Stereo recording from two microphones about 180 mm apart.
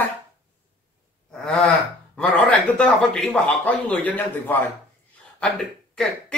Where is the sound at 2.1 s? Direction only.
5° left (ahead or behind).